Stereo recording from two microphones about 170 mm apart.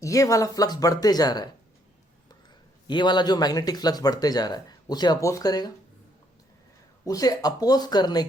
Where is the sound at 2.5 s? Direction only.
25° left (ahead or behind).